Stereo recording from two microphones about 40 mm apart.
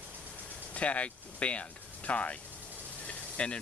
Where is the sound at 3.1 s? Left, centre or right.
Left.